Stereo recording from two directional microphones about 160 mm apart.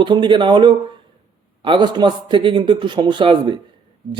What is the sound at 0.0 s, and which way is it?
A man's voice, 30° right (ahead or behind).